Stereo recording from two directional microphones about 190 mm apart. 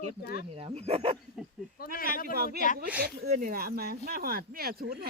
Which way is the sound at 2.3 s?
55° right (ahead or behind).